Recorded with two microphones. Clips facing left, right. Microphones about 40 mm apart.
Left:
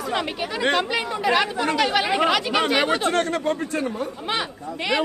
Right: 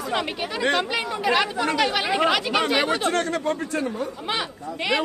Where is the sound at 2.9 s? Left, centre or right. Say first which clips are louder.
Left 1 dB; centre.